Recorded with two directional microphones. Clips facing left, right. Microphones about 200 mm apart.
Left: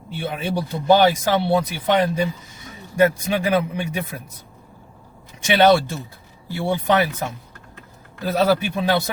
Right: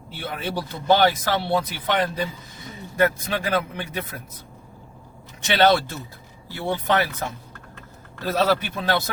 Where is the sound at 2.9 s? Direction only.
15° left (ahead or behind).